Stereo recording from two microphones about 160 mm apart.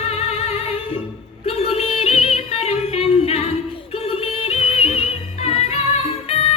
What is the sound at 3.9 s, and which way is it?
Music, 40° left (ahead or behind).